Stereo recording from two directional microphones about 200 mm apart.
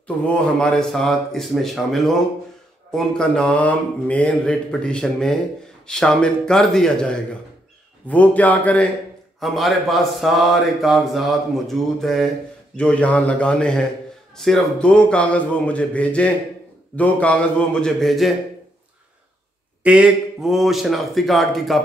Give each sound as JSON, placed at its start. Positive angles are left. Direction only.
{"t": 0.0, "sound": "a man's voice", "side_deg": 5}
{"t": 19.8, "sound": "speech", "side_deg": -5}